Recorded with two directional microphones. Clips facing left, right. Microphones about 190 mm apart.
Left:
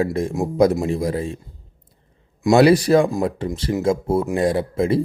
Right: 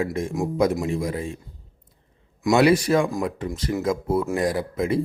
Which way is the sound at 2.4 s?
35° left (ahead or behind).